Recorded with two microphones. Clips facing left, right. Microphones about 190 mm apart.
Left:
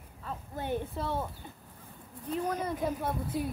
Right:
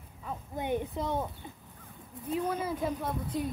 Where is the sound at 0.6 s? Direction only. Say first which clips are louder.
Right 2 dB; 15° right (ahead or behind).